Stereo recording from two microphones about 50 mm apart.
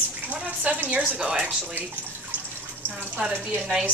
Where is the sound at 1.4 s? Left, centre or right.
Right.